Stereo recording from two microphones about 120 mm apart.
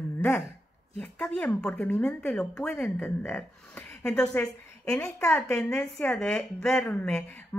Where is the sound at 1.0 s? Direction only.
10° left (ahead or behind).